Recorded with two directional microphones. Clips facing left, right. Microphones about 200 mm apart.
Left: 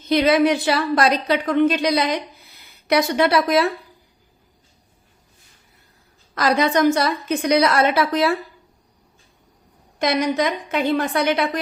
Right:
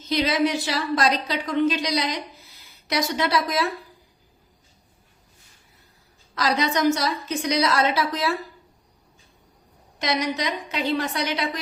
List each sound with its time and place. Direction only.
0.0 s a woman's voice: 55° left (ahead or behind)
6.3 s a woman's voice: 55° left (ahead or behind)
10.0 s a woman's voice: 50° left (ahead or behind)